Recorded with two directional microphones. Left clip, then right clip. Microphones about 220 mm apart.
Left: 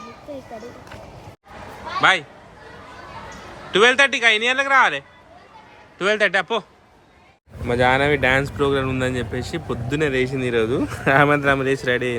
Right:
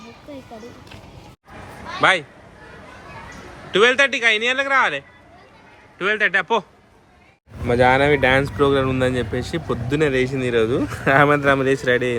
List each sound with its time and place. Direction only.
2.0 s a man's voice: 5° left (ahead or behind)
3.7 s speech: 15° left (ahead or behind)